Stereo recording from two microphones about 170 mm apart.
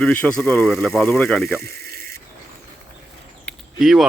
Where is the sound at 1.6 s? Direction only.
65° right (ahead or behind).